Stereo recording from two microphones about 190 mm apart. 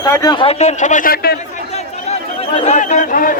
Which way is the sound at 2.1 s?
35° left (ahead or behind).